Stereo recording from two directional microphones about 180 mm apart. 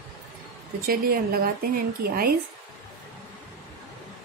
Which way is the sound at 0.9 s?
55° right (ahead or behind).